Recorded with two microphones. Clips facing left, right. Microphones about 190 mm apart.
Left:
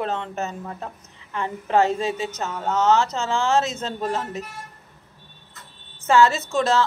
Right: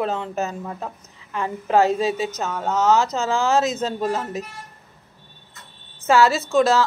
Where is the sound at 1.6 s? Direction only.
10° right (ahead or behind).